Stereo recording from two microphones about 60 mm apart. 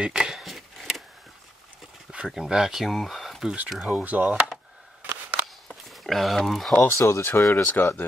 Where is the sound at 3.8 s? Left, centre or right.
Right.